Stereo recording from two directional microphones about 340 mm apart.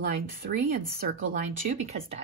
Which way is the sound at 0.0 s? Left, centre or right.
Right.